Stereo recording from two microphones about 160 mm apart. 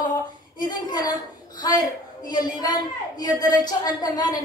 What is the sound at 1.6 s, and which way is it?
A woman's voice, 25° left (ahead or behind).